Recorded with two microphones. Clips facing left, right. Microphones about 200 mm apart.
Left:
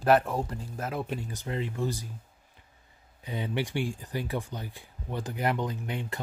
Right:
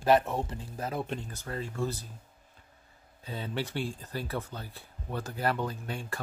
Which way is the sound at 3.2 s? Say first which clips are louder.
Left 3 dB; 15° left (ahead or behind).